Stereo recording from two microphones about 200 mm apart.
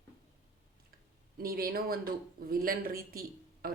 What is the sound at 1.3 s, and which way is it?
Speech, 50° right (ahead or behind).